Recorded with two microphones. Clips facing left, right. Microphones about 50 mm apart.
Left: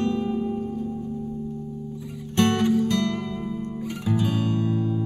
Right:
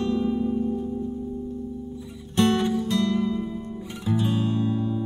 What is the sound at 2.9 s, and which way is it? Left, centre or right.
Music, left.